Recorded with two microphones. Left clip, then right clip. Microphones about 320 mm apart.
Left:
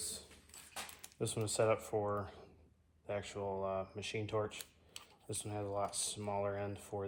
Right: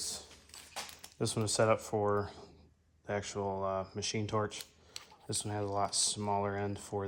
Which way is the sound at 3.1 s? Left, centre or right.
Right.